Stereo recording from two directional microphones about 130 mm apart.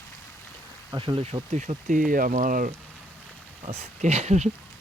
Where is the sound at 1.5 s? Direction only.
75° right (ahead or behind).